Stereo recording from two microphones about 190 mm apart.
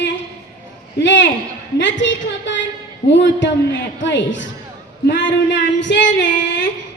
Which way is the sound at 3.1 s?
75° left (ahead or behind).